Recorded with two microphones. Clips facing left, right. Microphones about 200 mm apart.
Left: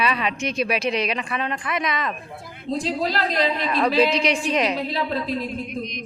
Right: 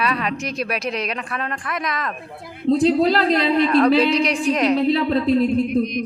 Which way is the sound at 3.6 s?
Centre (ahead or behind).